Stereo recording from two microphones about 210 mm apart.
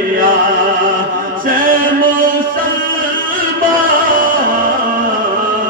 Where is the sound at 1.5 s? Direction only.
40° right (ahead or behind).